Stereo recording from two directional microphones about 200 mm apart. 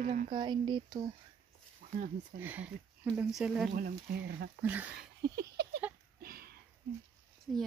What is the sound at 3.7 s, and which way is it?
Speech, 45° right (ahead or behind).